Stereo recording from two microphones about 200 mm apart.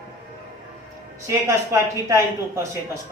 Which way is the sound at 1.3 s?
15° right (ahead or behind).